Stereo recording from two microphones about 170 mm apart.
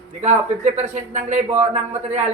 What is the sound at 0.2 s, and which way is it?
Speech, 45° right (ahead or behind).